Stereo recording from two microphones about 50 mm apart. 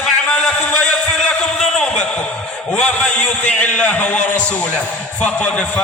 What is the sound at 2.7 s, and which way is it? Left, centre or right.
A man's voice, left.